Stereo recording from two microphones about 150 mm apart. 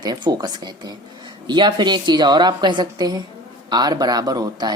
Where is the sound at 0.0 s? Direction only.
25° right (ahead or behind).